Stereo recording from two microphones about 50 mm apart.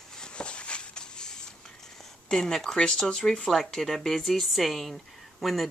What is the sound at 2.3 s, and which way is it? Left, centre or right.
Speech, centre.